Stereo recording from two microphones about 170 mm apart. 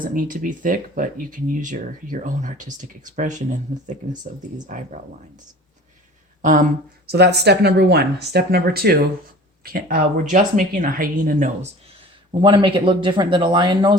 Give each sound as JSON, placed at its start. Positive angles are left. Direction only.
{"t": 0.0, "sound": "speech", "side_deg": -50}
{"t": 6.4, "sound": "speech", "side_deg": -50}
{"t": 7.1, "sound": "speech", "side_deg": -75}
{"t": 12.3, "sound": "speech", "side_deg": -30}